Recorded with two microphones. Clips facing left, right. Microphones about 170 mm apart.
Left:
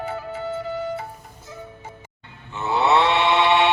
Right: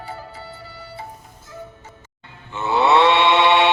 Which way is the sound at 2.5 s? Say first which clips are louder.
Right 2 dB; 90° right.